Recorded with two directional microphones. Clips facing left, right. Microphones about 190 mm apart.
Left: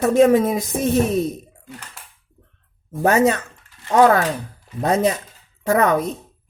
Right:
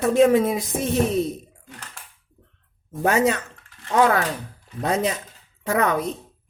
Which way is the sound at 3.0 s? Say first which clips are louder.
Left 3 dB; 40° left (ahead or behind).